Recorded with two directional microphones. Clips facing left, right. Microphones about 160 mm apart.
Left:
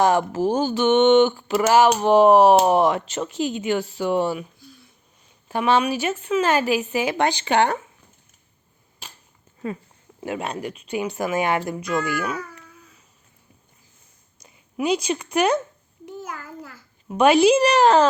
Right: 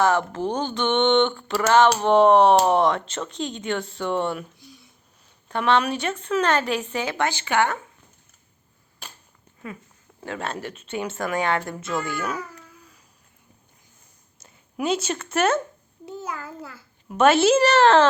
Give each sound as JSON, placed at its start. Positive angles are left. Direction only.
{"t": 0.0, "sound": "speech", "side_deg": 15}
{"t": 5.5, "sound": "speech", "side_deg": 10}
{"t": 10.2, "sound": "speech", "side_deg": 15}
{"t": 11.3, "sound": "speech", "side_deg": 20}
{"t": 11.9, "sound": "speech", "side_deg": 0}
{"t": 14.4, "sound": "a sound", "side_deg": 0}
{"t": 15.3, "sound": "speech", "side_deg": 0}
{"t": 17.2, "sound": "speech", "side_deg": 0}